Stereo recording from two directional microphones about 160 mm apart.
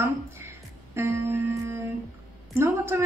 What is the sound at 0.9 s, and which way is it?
Music, 15° right (ahead or behind).